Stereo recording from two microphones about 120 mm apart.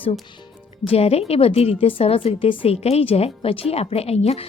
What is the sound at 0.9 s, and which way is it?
A woman's voice, 55° left (ahead or behind).